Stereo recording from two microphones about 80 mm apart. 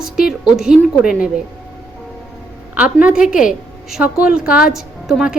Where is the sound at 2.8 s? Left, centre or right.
Centre.